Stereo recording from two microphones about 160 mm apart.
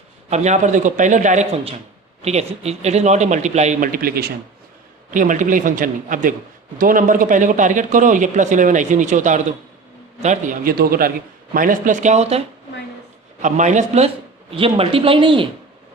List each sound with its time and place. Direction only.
0.3 s speech: 45° right (ahead or behind)
3.9 s speech: 70° right (ahead or behind)
5.1 s speech: 55° right (ahead or behind)
11.5 s speech: 55° right (ahead or behind)
13.4 s speech: 50° right (ahead or behind); by 15.4 s 30° right (ahead or behind)